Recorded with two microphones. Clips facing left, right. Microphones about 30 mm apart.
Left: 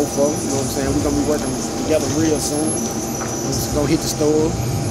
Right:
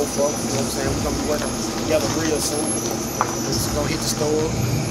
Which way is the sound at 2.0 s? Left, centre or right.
Right.